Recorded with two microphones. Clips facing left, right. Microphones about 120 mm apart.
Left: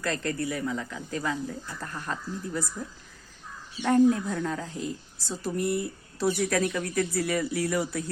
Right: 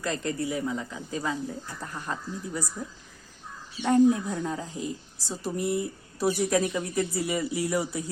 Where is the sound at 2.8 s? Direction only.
Centre (ahead or behind).